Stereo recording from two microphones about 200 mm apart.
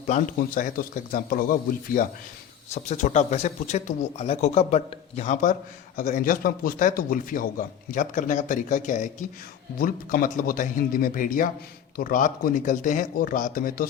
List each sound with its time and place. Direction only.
0.1 s a man's voice: 45° left (ahead or behind)
2.7 s a man's voice: 35° left (ahead or behind)